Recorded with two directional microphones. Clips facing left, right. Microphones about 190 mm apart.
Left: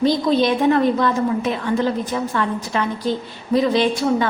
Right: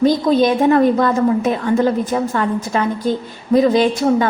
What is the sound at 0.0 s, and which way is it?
A woman's voice, 45° right (ahead or behind).